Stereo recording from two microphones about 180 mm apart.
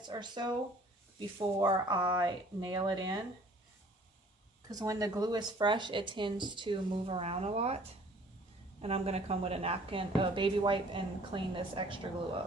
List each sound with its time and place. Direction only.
0.0 s a woman's voice: 25° right (ahead or behind)
4.7 s a woman's voice: 20° right (ahead or behind); by 7.8 s 35° right (ahead or behind)
8.8 s a woman's voice: 35° right (ahead or behind)